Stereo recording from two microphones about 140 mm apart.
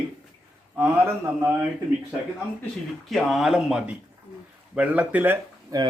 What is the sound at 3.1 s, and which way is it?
Speech, centre (ahead or behind).